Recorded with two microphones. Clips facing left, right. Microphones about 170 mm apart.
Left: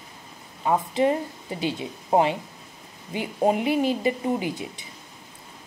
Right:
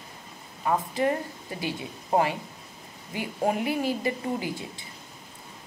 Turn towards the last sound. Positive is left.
turn(degrees=20)  # may be behind; listen again after turning